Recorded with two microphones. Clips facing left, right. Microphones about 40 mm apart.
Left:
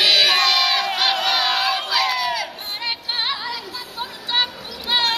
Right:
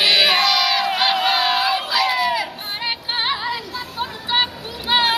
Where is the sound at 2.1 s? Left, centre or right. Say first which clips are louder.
Right 3 dB; centre.